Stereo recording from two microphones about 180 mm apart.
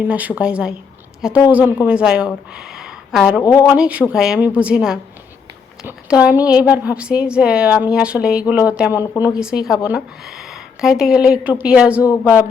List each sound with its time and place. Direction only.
0.1 s a woman's voice: 5° right (ahead or behind)
3.4 s speech: 15° left (ahead or behind)
3.8 s a woman's voice: 5° right (ahead or behind)